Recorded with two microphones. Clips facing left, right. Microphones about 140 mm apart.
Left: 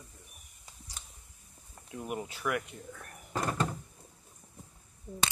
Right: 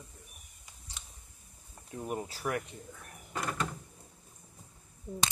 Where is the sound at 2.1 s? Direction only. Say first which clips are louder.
Left 1 dB; 35° right (ahead or behind).